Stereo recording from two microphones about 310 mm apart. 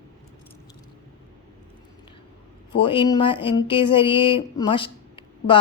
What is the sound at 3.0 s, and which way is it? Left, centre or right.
Speech, centre.